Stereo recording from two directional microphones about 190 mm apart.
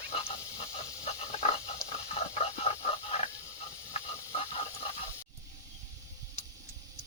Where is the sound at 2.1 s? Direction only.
35° left (ahead or behind).